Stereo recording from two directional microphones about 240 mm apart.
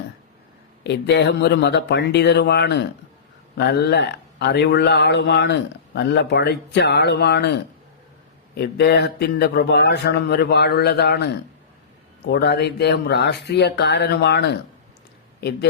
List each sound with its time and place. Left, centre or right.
0.9 s speech: left